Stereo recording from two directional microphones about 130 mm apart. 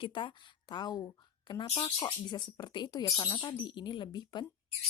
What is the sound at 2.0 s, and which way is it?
A woman's voice, 35° left (ahead or behind).